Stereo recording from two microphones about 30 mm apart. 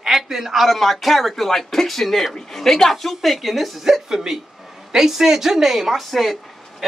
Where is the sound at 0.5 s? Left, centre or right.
Centre.